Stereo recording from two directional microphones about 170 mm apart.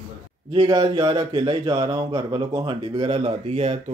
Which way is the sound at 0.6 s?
25° right (ahead or behind).